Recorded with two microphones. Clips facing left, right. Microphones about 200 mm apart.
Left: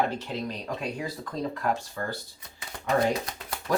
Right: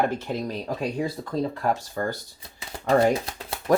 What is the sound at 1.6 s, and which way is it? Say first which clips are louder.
Speech: right 3 dB; 45° right (ahead or behind).